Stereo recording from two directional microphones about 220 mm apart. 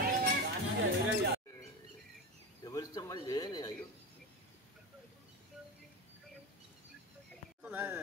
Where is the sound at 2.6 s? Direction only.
15° left (ahead or behind).